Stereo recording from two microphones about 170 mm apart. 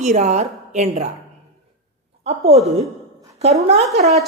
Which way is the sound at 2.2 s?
35° right (ahead or behind).